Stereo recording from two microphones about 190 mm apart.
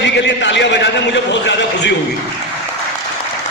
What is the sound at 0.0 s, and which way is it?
A man's voice, 70° left (ahead or behind).